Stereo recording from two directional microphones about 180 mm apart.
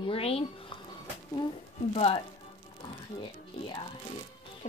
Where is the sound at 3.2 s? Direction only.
30° left (ahead or behind).